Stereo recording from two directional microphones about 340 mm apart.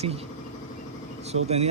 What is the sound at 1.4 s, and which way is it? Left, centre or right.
Speech, centre.